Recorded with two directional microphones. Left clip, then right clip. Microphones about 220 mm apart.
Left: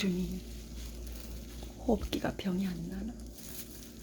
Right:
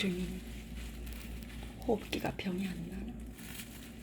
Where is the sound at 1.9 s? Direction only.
20° left (ahead or behind).